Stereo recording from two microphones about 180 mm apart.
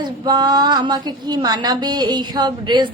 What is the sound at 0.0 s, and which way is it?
A woman's voice, 20° right (ahead or behind).